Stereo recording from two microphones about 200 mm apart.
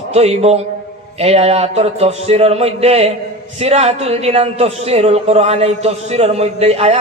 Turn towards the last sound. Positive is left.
turn(degrees=-30)  # may be behind; listen again after turning